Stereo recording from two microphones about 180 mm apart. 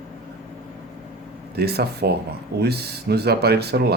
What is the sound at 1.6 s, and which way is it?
Speech, 65° right (ahead or behind).